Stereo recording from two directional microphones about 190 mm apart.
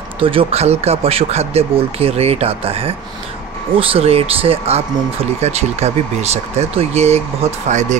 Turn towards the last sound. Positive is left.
turn(degrees=-40)  # may be behind; listen again after turning